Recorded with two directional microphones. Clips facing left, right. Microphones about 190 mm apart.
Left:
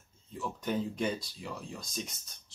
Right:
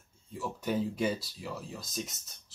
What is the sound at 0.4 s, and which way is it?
Speech, 5° right (ahead or behind).